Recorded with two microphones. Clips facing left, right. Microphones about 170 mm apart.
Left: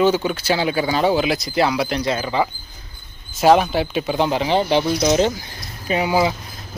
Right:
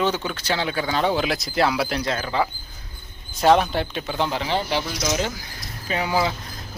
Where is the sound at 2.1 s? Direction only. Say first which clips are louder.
Left 3 dB; 10° left (ahead or behind).